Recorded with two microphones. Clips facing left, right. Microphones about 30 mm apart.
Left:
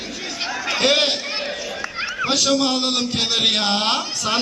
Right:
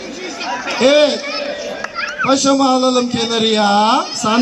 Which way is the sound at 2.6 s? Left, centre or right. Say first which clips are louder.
Right 8 dB; left.